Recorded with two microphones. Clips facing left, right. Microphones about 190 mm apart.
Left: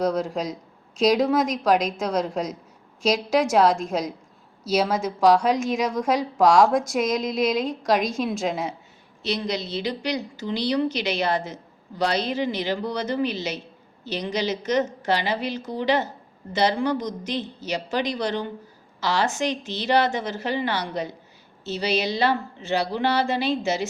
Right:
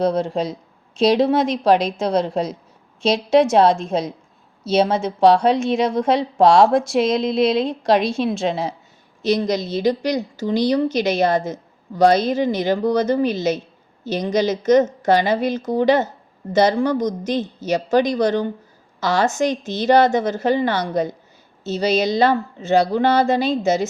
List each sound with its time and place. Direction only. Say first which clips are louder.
0.0 s a woman's voice: right 4 dB; 30° right (ahead or behind)
9.2 s a woman's voice: right 8 dB; 45° right (ahead or behind)